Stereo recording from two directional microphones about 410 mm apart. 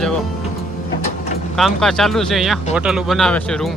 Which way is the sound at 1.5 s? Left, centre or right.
Centre.